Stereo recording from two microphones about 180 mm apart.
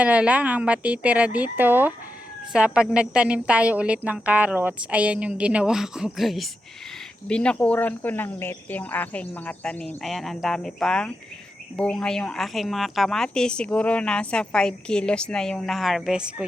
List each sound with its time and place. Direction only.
0.0 s a woman's voice: 10° right (ahead or behind)